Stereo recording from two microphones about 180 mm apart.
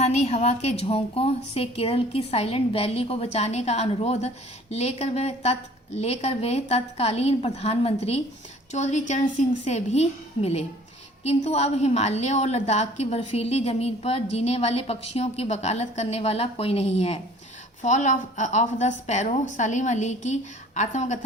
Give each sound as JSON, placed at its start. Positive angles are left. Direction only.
{"t": 0.0, "sound": "a woman's voice", "side_deg": 35}